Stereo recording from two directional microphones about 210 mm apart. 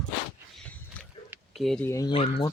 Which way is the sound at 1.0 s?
5° left (ahead or behind).